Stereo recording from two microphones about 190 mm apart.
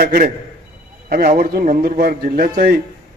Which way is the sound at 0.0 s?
50° right (ahead or behind).